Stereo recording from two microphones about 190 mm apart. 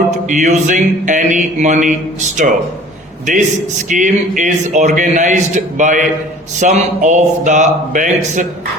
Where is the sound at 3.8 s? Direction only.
40° right (ahead or behind).